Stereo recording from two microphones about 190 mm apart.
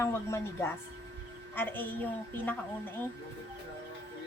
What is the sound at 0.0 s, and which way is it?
Speech, 15° left (ahead or behind).